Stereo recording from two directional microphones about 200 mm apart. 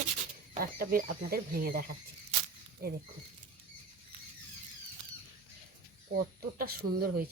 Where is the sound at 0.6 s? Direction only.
45° right (ahead or behind).